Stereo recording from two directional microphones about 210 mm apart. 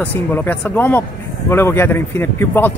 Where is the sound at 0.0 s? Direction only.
10° left (ahead or behind).